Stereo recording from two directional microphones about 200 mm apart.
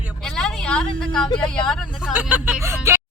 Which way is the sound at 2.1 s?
5° right (ahead or behind).